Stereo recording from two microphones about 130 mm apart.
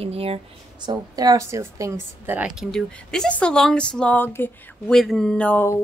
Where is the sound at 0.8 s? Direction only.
30° right (ahead or behind).